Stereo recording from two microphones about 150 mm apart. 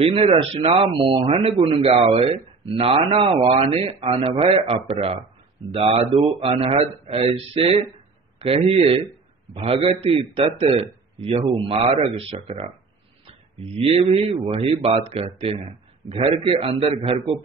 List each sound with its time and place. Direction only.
0.1 s a man's voice: 40° right (ahead or behind)